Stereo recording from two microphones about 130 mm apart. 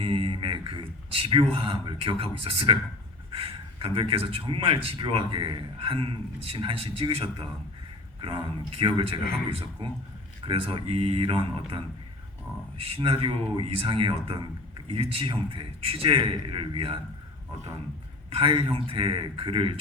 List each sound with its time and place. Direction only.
0.0 s speech: 45° right (ahead or behind)
18.3 s speech: 40° right (ahead or behind)